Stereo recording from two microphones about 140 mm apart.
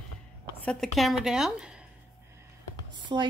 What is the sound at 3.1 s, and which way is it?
Speech, 45° right (ahead or behind).